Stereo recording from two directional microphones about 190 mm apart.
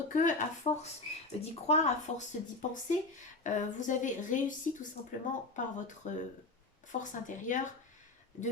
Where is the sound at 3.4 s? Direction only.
40° left (ahead or behind).